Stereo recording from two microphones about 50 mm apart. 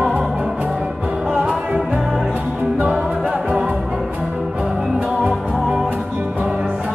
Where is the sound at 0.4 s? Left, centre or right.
Right.